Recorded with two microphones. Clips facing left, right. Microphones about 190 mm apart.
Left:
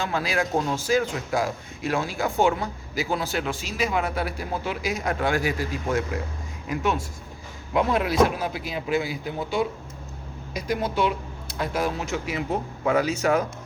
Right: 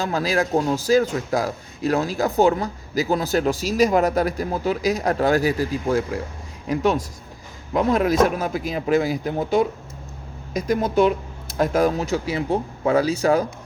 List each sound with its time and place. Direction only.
0.0 s a man's voice: 40° right (ahead or behind)